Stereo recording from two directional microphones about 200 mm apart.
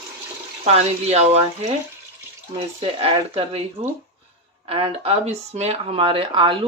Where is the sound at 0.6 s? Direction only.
30° right (ahead or behind).